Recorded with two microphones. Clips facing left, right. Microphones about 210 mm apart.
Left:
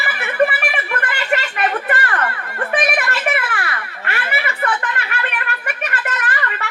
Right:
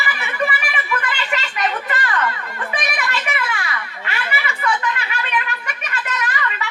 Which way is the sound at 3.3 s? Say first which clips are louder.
Left 4 dB; 55° left (ahead or behind).